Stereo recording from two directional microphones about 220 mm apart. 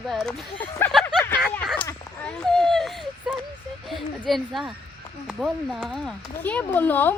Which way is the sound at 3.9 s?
Centre (ahead or behind).